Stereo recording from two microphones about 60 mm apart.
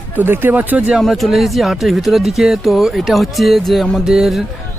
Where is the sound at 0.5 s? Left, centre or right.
Right.